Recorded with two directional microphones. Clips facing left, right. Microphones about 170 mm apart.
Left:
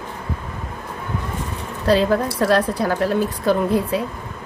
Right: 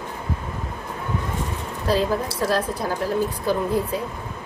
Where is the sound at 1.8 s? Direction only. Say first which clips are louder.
Left 5 dB; 70° left (ahead or behind).